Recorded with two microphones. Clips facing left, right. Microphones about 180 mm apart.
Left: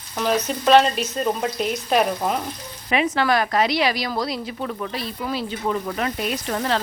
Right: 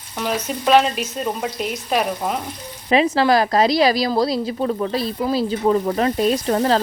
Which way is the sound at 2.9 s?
30° right (ahead or behind).